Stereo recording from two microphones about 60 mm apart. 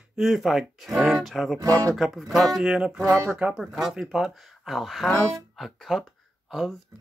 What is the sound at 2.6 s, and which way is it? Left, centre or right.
Speech, centre.